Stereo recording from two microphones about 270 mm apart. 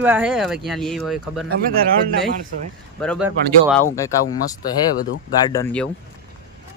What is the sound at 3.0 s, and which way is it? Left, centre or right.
Speech, centre.